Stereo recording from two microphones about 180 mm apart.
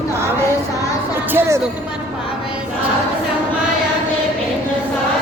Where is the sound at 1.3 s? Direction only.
15° right (ahead or behind).